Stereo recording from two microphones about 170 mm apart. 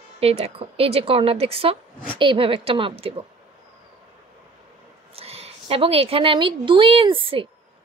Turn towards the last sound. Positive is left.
turn(degrees=-30)  # may be behind; listen again after turning